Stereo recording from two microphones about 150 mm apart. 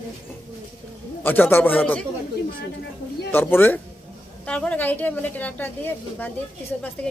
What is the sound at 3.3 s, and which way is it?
A woman's voice, 15° left (ahead or behind).